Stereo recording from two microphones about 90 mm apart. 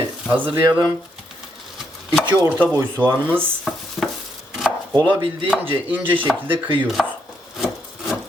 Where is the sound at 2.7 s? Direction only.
20° right (ahead or behind).